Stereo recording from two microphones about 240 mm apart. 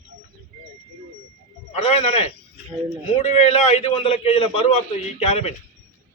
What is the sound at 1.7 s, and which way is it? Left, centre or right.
A man's voice, left.